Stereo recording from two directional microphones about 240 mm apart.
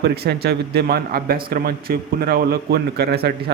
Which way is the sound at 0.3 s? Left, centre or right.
Right.